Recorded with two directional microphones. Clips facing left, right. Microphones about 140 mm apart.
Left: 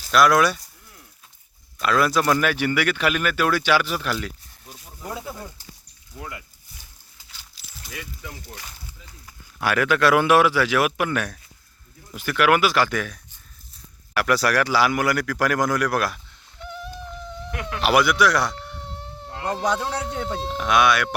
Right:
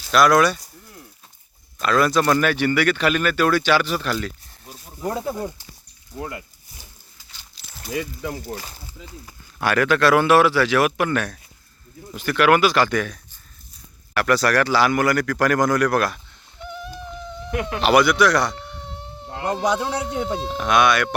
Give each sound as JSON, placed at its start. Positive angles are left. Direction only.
{"t": 0.1, "sound": "speech", "side_deg": 5}
{"t": 1.8, "sound": "speech", "side_deg": 5}
{"t": 5.0, "sound": "speech", "side_deg": -45}
{"t": 6.1, "sound": "speech", "side_deg": -30}
{"t": 7.3, "sound": "dog", "side_deg": 5}
{"t": 7.9, "sound": "speech", "side_deg": -35}
{"t": 9.6, "sound": "speech", "side_deg": 10}
{"t": 17.5, "sound": "speech", "side_deg": -30}
{"t": 17.8, "sound": "fly", "side_deg": 5}
{"t": 19.6, "sound": "a man's voice", "side_deg": -10}
{"t": 20.4, "sound": "speech", "side_deg": 0}